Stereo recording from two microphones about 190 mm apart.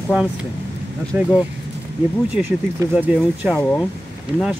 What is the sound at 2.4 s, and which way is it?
Speech, 5° right (ahead or behind).